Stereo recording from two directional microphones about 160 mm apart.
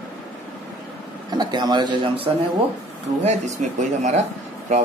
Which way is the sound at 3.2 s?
45° right (ahead or behind).